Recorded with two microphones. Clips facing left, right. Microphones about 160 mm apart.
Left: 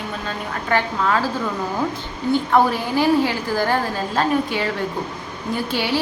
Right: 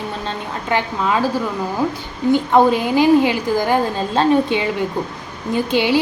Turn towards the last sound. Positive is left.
turn(degrees=-20)  # may be behind; listen again after turning